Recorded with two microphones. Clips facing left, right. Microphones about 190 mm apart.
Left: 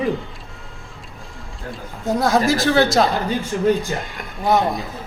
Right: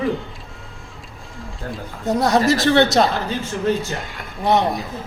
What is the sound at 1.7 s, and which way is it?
Speech, centre (ahead or behind).